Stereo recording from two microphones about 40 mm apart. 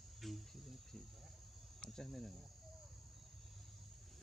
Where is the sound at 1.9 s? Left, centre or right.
Centre.